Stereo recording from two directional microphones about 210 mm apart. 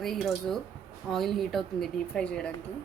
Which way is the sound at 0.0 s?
Centre (ahead or behind).